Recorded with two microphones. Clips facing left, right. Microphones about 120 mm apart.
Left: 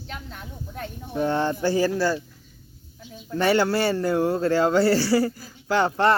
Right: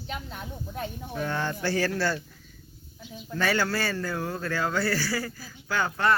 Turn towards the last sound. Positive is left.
turn(degrees=30)  # may be behind; listen again after turning